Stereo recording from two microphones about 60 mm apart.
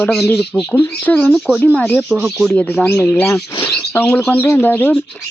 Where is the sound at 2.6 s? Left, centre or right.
Left.